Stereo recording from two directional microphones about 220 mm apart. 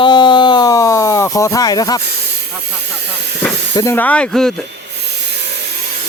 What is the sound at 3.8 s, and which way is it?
Speech, 10° left (ahead or behind).